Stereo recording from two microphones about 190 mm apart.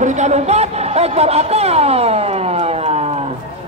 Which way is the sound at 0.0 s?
40° right (ahead or behind).